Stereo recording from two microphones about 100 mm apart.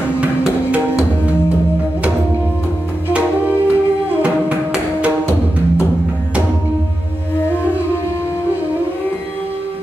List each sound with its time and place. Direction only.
3.1 s music: 15° right (ahead or behind)